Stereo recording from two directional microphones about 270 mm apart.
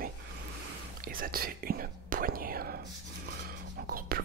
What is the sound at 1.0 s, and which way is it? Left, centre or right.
Speech, right.